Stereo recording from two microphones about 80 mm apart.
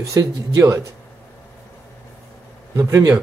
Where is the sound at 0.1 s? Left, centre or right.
Right.